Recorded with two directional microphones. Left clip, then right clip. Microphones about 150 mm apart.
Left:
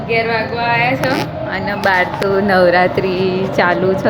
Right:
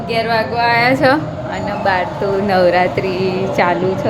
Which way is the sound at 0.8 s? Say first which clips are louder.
Right 4 dB; 90° right.